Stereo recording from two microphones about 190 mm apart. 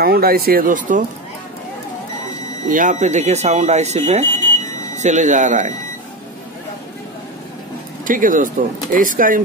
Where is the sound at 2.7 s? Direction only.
40° right (ahead or behind).